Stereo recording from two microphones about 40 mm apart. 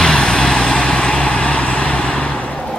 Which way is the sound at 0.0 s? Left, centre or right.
Centre.